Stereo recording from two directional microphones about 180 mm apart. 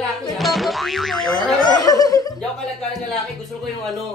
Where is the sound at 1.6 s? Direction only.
20° left (ahead or behind).